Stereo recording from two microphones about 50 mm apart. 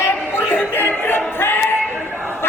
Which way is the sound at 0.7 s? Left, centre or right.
Left.